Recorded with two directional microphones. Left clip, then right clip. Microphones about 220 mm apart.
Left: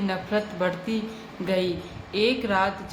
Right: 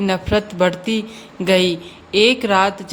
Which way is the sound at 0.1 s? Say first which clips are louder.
Right 8 dB; 45° right (ahead or behind).